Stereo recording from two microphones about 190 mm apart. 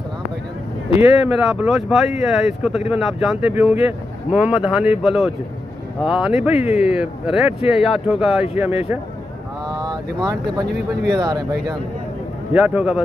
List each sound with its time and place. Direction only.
0.9 s speech: 10° right (ahead or behind)
6.5 s speech: 35° left (ahead or behind)
6.8 s speech: 5° right (ahead or behind)
9.7 s vehicle: 20° right (ahead or behind)
10.7 s speech: 60° right (ahead or behind)
11.1 s speech: 20° right (ahead or behind)
12.5 s speech: 5° right (ahead or behind)